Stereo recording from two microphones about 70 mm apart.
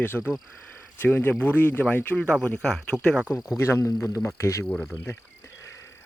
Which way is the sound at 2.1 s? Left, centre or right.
Centre.